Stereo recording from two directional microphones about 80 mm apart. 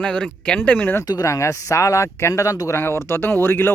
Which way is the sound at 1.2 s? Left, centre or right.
Left.